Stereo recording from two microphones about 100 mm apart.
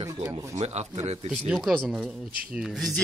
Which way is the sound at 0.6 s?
90° right.